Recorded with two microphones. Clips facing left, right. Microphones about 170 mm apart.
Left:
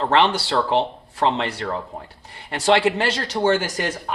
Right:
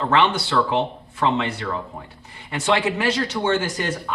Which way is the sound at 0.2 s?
35° left (ahead or behind).